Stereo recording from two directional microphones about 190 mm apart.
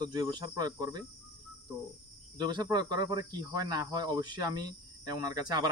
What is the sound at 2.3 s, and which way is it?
Speech, 20° right (ahead or behind).